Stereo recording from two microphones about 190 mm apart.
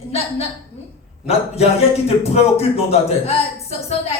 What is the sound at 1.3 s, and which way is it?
A man's voice, 30° left (ahead or behind).